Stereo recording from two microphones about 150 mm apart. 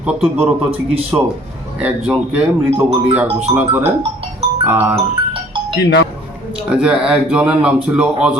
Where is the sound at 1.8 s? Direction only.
10° right (ahead or behind).